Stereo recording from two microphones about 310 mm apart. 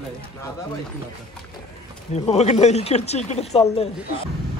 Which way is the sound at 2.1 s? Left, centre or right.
Left.